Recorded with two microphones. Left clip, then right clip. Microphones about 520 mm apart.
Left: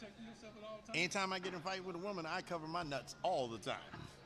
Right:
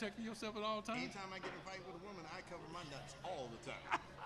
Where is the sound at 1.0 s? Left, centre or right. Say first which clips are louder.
Left 9 dB; left.